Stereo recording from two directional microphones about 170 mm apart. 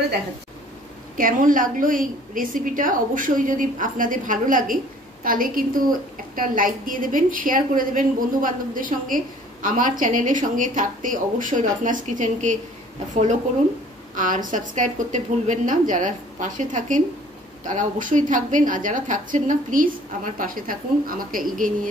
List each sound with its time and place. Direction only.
1.1 s a woman's voice: 55° right (ahead or behind)